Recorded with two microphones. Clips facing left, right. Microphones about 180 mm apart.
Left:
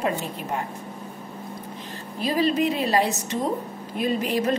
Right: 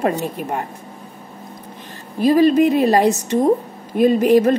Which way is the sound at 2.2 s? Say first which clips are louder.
Right 9 dB; 50° right (ahead or behind).